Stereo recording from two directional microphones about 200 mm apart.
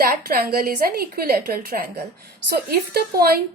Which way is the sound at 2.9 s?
50° right (ahead or behind).